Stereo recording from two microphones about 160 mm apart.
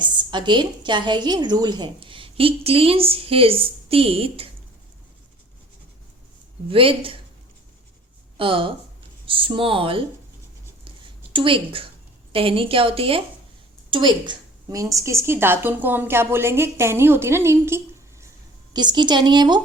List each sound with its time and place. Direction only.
0.0 s a woman's voice: 30° right (ahead or behind)
6.7 s a woman's voice: 35° right (ahead or behind)
8.4 s a woman's voice: 35° right (ahead or behind)
10.8 s a sound: 30° right (ahead or behind)
12.3 s a woman's voice: 35° right (ahead or behind); by 18.3 s 15° right (ahead or behind)
18.7 s a woman's voice: 25° right (ahead or behind)